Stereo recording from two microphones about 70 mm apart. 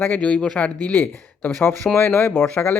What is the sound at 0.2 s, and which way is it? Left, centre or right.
Speech, centre.